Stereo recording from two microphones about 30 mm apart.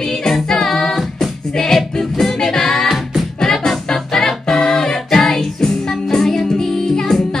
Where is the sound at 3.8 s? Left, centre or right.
Centre.